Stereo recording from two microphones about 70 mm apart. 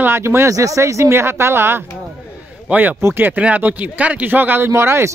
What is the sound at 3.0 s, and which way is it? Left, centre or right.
Speech, right.